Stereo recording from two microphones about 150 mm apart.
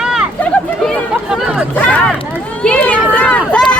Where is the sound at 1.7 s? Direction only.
10° left (ahead or behind).